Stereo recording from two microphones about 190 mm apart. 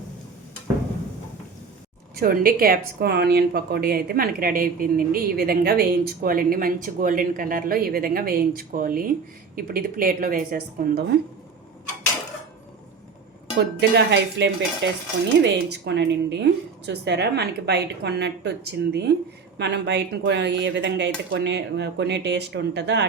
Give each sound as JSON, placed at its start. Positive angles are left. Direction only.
{"t": 2.1, "sound": "a woman's voice", "side_deg": -50}
{"t": 13.7, "sound": "a woman's voice", "side_deg": -60}
{"t": 14.8, "sound": "cutlery", "side_deg": -70}
{"t": 15.4, "sound": "a woman's voice", "side_deg": -60}